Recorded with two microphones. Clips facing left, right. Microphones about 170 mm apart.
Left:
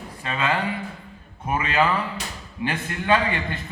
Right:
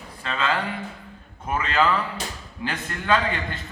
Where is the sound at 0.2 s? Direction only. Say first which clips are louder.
Left 1 dB; 15° left (ahead or behind).